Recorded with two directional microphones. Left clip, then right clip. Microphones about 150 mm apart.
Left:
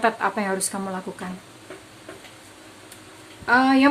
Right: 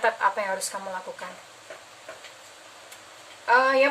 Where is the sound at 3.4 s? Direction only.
45° left (ahead or behind).